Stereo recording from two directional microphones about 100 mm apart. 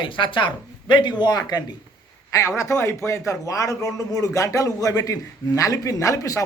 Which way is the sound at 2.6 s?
30° left (ahead or behind).